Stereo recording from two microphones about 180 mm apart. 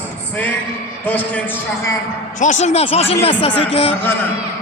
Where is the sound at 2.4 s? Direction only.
40° left (ahead or behind).